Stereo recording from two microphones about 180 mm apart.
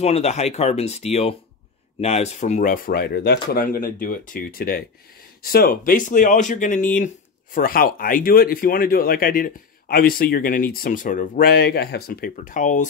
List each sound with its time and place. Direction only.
0.0 s speech: 35° left (ahead or behind)